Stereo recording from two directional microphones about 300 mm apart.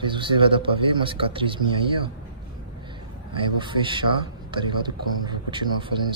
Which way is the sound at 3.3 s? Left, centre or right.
Centre.